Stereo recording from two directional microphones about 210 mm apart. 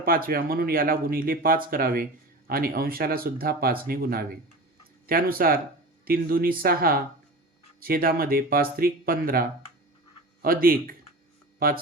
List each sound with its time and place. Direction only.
0.0 s speech: 45° right (ahead or behind)